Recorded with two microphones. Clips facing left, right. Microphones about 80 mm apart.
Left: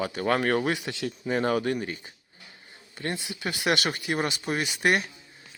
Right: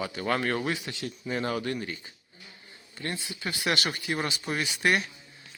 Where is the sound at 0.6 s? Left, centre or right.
Left.